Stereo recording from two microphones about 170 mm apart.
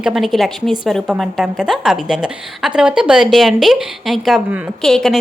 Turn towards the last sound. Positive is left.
turn(degrees=5)  # may be behind; listen again after turning